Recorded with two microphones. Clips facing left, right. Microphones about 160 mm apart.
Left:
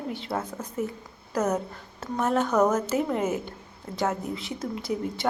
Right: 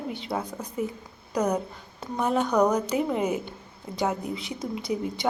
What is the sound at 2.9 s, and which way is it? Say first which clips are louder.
A woman's voice: even; 10° right (ahead or behind).